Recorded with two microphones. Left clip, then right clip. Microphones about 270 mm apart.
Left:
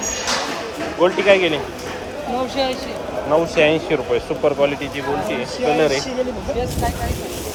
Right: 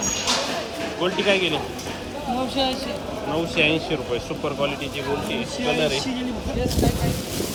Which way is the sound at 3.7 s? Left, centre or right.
Left.